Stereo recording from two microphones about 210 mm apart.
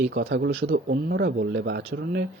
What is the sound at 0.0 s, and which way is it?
A man's voice, 55° right (ahead or behind).